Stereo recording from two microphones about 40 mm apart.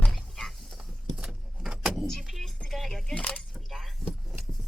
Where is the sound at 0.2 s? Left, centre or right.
Centre.